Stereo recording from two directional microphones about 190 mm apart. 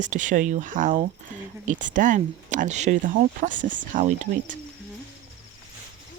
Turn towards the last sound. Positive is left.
turn(degrees=-40)  # may be behind; listen again after turning